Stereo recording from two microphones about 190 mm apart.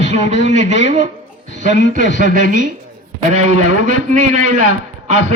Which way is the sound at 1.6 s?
65° left (ahead or behind).